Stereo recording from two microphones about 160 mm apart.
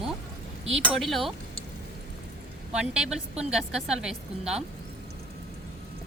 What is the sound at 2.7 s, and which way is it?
A woman's voice, 5° right (ahead or behind).